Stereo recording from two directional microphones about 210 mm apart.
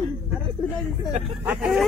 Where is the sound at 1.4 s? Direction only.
5° right (ahead or behind).